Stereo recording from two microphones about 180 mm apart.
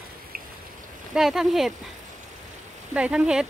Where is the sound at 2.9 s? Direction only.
5° right (ahead or behind).